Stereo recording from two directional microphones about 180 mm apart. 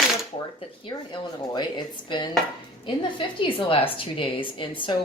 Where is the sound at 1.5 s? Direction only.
25° left (ahead or behind).